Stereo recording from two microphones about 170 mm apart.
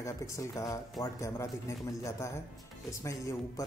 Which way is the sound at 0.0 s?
20° left (ahead or behind).